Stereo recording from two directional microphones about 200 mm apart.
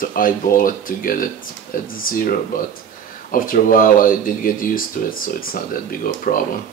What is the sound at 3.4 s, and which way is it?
Speech, 45° left (ahead or behind).